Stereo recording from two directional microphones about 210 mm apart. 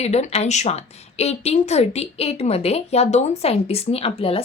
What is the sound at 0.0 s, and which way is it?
Speech, 30° left (ahead or behind).